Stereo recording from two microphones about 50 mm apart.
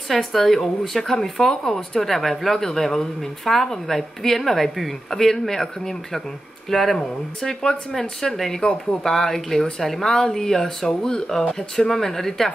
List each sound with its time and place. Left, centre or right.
0.1 s speech: centre